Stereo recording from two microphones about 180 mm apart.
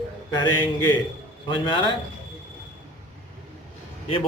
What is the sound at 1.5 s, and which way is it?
Speech, 25° left (ahead or behind).